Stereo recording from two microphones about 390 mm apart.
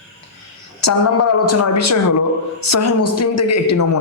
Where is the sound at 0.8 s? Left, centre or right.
Left.